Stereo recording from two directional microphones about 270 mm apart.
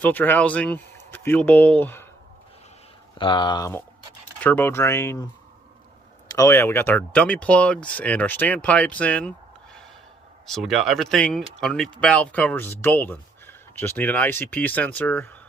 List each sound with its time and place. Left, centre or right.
0.0 s speech: centre
3.2 s speech: centre
10.5 s speech: centre